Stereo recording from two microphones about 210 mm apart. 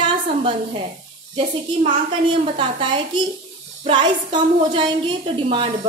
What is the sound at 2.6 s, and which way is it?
A woman's voice, 25° right (ahead or behind).